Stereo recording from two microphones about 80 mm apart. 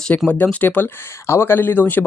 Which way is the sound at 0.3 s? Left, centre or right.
Centre.